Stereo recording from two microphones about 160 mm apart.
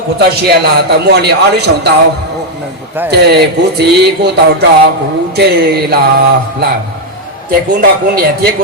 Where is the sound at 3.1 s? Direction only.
90° right.